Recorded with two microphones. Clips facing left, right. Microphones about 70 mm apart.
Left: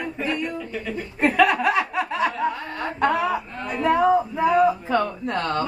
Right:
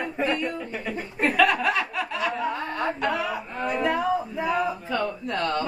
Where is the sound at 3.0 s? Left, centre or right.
Left.